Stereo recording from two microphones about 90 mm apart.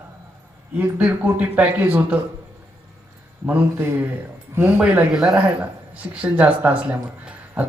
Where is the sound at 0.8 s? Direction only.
15° right (ahead or behind).